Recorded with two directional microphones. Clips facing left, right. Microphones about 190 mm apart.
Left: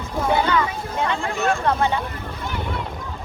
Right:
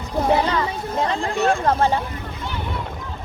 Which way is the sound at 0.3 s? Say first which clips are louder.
Even; 30° right (ahead or behind).